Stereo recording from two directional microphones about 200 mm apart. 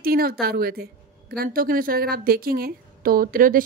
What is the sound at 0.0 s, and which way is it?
A woman's voice, 50° right (ahead or behind).